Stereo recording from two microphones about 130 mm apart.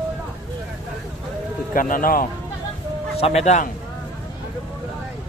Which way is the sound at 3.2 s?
55° left (ahead or behind).